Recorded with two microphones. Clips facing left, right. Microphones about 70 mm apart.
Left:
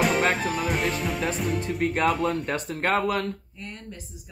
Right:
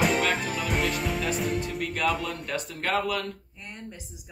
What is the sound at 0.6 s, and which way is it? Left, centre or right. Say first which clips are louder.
Music: left 1 dB; centre.